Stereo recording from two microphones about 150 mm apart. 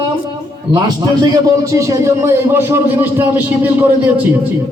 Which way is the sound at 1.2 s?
25° right (ahead or behind).